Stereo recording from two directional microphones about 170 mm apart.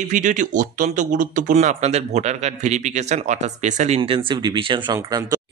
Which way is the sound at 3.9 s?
30° right (ahead or behind).